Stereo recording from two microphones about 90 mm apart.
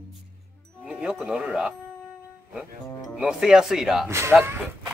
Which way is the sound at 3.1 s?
10° right (ahead or behind).